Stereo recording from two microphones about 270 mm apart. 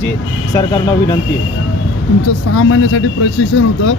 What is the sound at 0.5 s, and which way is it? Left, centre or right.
Speech, centre.